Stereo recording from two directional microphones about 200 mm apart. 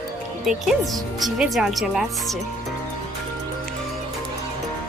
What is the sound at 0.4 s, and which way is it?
Speech, centre (ahead or behind).